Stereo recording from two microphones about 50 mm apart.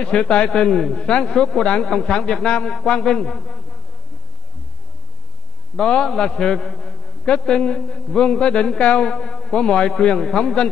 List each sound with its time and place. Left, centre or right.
0.0 s a man's voice: centre
5.8 s a man's voice: centre